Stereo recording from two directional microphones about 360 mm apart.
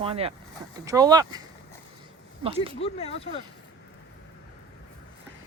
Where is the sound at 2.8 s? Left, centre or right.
Centre.